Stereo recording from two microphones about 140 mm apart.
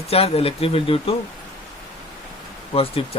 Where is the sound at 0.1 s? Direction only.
45° left (ahead or behind).